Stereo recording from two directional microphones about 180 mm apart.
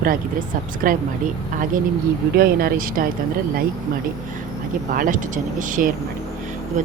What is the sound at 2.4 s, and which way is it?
Speech, 55° right (ahead or behind).